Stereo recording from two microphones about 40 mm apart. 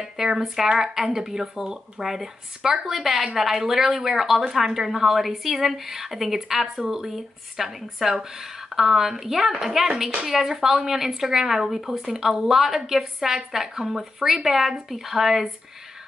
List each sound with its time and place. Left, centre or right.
0.0 s speech: centre